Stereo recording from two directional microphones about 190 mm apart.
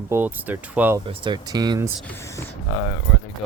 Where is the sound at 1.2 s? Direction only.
20° right (ahead or behind).